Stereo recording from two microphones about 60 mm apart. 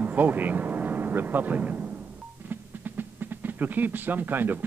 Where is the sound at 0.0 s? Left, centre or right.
Right.